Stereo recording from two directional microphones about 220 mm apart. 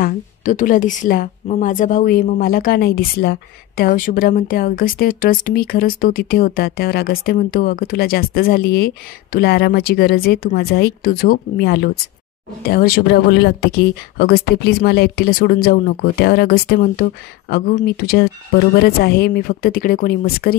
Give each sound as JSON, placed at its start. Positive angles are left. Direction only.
{"t": 0.0, "sound": "a woman's voice", "side_deg": 35}